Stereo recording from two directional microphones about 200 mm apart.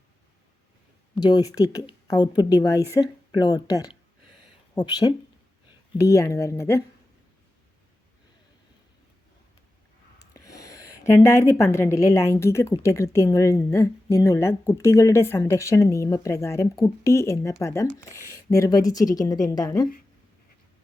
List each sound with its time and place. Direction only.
1.2 s a woman's voice: 20° left (ahead or behind)
10.3 s a woman's voice: 15° left (ahead or behind)